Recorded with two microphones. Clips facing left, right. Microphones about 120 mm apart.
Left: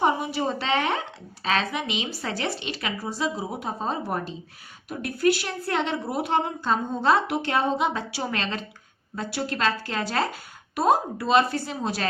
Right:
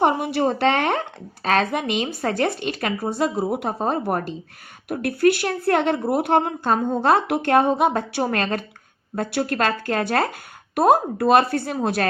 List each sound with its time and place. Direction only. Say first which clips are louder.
0.0 s a woman's voice: right 4 dB; 55° right (ahead or behind)